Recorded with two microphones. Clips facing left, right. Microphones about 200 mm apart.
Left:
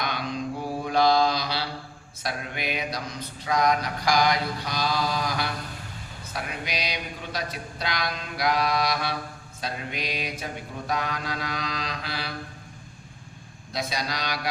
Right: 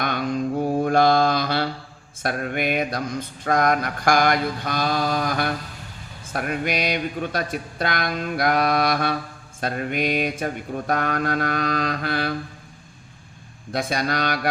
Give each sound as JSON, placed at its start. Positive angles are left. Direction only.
{"t": 0.0, "sound": "mantra", "side_deg": -50}
{"t": 13.7, "sound": "speech", "side_deg": -50}